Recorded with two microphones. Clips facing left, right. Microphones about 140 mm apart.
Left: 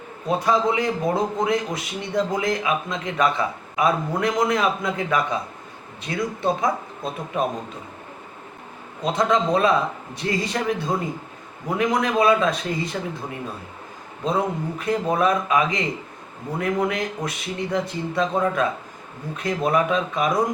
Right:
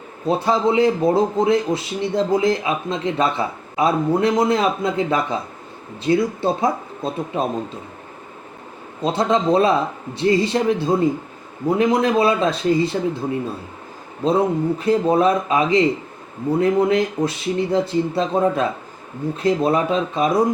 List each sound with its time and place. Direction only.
0.3 s a man's voice: 30° right (ahead or behind)
9.0 s a man's voice: 30° right (ahead or behind)
14.3 s a man's voice: 30° right (ahead or behind)